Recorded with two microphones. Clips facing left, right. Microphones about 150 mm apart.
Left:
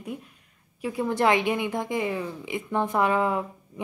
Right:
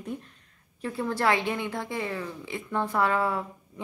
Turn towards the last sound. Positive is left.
turn(degrees=20)  # may be behind; listen again after turning